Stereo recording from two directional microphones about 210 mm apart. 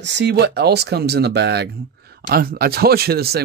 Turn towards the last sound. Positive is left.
turn(degrees=-50)  # may be behind; listen again after turning